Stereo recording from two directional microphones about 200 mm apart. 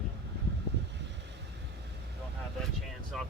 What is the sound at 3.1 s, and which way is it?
Speech, centre (ahead or behind).